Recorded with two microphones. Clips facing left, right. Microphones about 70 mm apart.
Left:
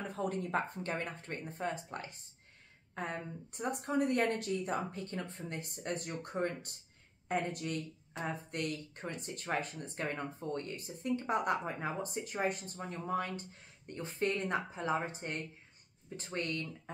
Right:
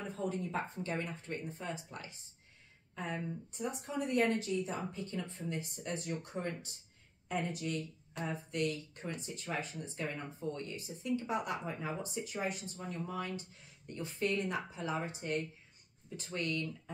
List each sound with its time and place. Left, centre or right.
0.1 s speech: left